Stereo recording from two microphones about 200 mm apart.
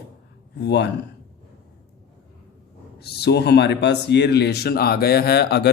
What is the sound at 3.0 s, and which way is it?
A man's voice, 55° left (ahead or behind).